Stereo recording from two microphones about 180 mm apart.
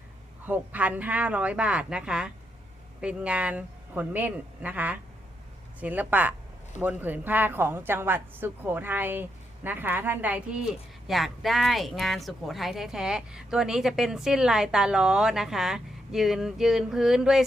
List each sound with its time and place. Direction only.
0.4 s a woman's voice: 10° right (ahead or behind)